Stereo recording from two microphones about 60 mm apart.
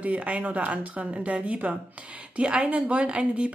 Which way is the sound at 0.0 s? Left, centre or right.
Right.